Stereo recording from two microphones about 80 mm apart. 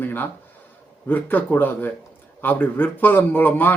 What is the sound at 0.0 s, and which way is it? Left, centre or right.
A man's voice, left.